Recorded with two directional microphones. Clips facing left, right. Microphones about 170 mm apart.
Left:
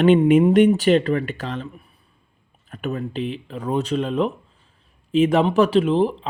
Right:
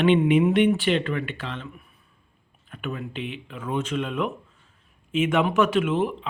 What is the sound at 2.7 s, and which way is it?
A man's voice, 40° left (ahead or behind).